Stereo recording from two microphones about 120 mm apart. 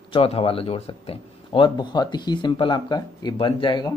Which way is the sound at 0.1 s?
50° left (ahead or behind).